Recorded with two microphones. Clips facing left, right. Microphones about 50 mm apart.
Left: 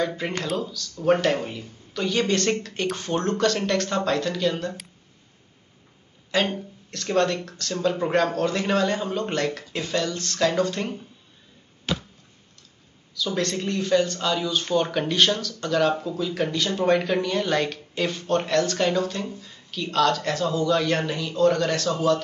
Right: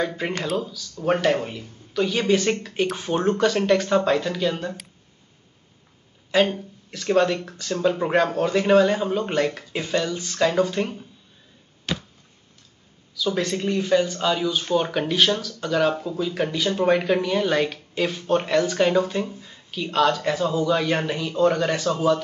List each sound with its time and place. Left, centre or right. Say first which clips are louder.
0.1 s speech: right 2 dB; centre
6.3 s speech: right 4 dB; centre
13.1 s speech: right 2 dB; centre